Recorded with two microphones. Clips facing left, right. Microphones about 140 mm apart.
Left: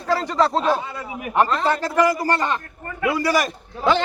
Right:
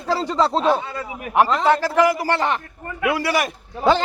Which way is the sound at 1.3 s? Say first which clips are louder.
Right 2 dB; 10° right (ahead or behind).